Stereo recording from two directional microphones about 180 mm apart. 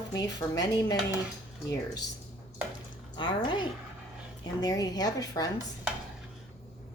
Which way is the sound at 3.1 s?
25° left (ahead or behind).